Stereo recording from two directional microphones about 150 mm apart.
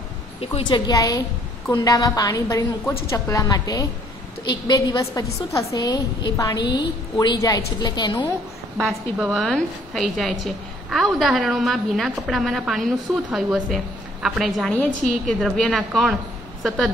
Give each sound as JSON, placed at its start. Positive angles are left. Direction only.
{"t": 0.4, "sound": "a woman's voice", "side_deg": 35}
{"t": 9.2, "sound": "a woman's voice", "side_deg": 0}